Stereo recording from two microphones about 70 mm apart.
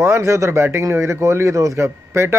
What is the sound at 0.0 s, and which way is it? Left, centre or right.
A man's voice, right.